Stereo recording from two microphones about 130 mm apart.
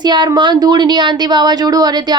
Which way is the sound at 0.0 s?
35° right (ahead or behind).